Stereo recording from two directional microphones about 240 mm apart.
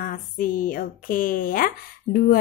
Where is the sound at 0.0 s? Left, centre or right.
Left.